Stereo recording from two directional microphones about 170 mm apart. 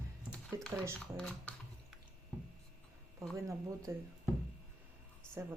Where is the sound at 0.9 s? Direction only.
5° left (ahead or behind).